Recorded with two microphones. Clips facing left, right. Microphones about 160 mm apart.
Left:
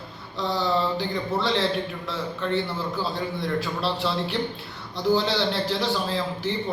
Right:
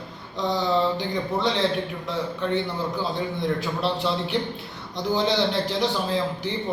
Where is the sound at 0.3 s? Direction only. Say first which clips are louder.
Right 2 dB; 20° right (ahead or behind).